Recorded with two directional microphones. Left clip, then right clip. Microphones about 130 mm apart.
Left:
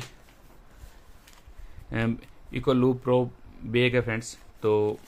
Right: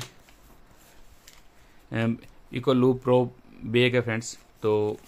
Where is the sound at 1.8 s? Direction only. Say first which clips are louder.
Right 1 dB; 10° right (ahead or behind).